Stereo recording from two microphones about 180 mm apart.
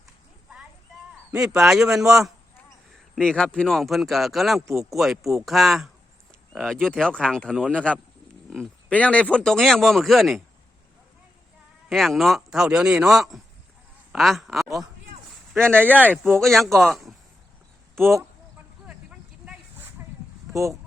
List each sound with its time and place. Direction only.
1.3 s a man's voice: 10° right (ahead or behind)
11.9 s a man's voice: centre (ahead or behind)
15.6 s speech: 10° right (ahead or behind)
16.1 s speech: centre (ahead or behind)
20.5 s speech: 15° right (ahead or behind)